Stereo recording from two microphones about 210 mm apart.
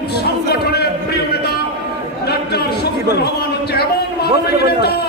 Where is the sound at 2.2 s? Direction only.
50° left (ahead or behind).